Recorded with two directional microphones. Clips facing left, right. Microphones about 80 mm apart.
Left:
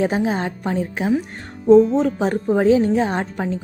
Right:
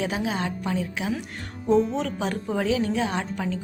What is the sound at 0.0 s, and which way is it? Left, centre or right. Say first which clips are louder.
A woman's voice: left 7 dB; left.